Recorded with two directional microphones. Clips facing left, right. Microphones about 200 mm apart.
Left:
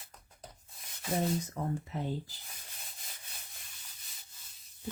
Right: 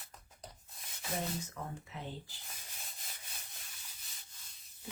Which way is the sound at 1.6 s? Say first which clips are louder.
Left 9 dB; 35° left (ahead or behind).